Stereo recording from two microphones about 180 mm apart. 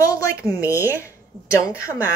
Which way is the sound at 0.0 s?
15° left (ahead or behind).